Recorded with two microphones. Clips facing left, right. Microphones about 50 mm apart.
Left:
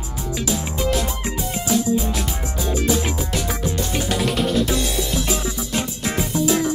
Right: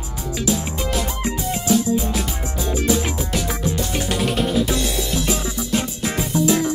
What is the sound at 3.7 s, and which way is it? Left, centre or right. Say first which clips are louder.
Music: even; centre.